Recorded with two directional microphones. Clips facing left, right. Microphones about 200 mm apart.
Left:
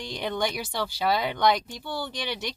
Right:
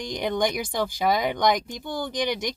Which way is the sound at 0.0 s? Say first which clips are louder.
Right 4 dB; 15° right (ahead or behind).